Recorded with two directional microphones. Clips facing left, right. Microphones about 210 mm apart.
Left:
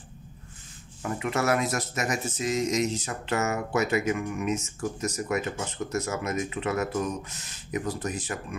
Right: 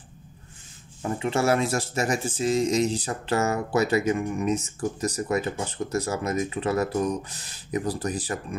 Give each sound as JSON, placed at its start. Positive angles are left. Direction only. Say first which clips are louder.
{"t": 1.0, "sound": "speech", "louder": "right 3 dB", "side_deg": -30}